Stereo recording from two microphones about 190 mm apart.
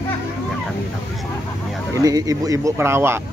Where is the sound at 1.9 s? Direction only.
20° right (ahead or behind).